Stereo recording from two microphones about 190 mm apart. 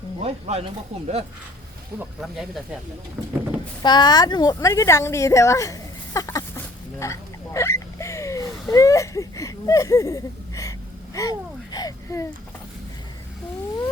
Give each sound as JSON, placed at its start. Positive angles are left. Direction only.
{"t": 0.2, "sound": "speech", "side_deg": -35}
{"t": 2.0, "sound": "speech", "side_deg": 0}
{"t": 3.8, "sound": "speech", "side_deg": 25}
{"t": 7.0, "sound": "hiccup", "side_deg": 15}
{"t": 8.7, "sound": "speech", "side_deg": 15}